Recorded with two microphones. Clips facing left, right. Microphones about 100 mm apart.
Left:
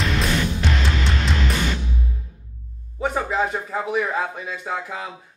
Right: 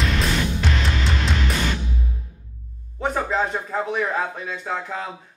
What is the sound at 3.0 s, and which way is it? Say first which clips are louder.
A man's voice: even; 5° left (ahead or behind).